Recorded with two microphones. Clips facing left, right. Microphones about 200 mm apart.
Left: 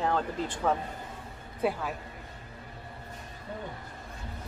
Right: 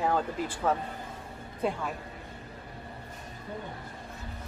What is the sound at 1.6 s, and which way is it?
Speech, 5° left (ahead or behind).